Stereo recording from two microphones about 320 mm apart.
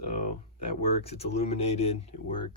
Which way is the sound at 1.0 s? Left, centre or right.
Centre.